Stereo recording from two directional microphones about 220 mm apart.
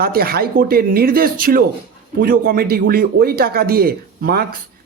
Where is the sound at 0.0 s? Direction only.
45° right (ahead or behind).